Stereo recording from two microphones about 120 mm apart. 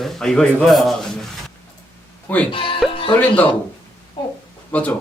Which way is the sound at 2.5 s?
45° left (ahead or behind).